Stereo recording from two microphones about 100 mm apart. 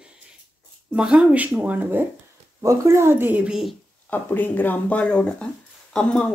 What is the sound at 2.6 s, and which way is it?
Speech, 30° right (ahead or behind).